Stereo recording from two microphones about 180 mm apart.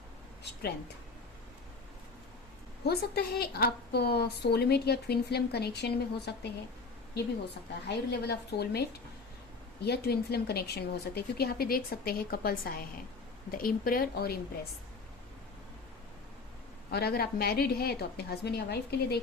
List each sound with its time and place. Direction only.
2.8 s a woman's voice: 60° left (ahead or behind)
7.9 s a woman's voice: 65° left (ahead or behind)
9.8 s a woman's voice: 60° left (ahead or behind)
16.9 s a woman's voice: 60° left (ahead or behind)